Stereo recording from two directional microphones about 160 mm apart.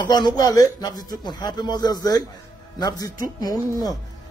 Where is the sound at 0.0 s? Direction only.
25° left (ahead or behind).